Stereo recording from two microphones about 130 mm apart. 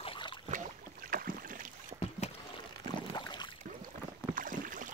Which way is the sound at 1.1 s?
90° right.